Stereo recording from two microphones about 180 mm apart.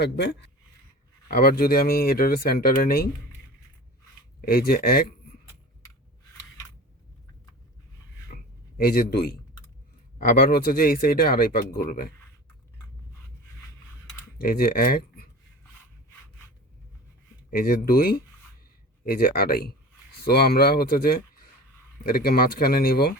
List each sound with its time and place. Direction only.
0.0 s speech: 70° left (ahead or behind)
1.3 s speech: 55° left (ahead or behind)
4.4 s speech: 55° left (ahead or behind)
8.4 s a sound: 60° left (ahead or behind)
10.2 s speech: 55° left (ahead or behind)
14.3 s speech: 55° left (ahead or behind)
17.5 s speech: 55° left (ahead or behind)